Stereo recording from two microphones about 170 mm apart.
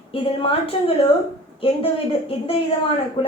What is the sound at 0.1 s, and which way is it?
Speech, 35° left (ahead or behind).